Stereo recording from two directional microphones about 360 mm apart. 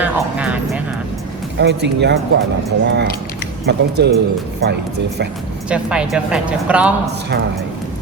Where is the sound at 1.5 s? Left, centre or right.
Right.